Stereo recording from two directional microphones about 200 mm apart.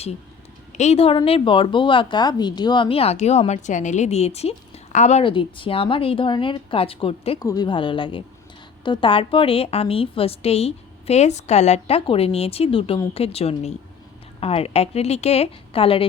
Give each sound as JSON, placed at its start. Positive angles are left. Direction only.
{"t": 0.8, "sound": "a woman's voice", "side_deg": 30}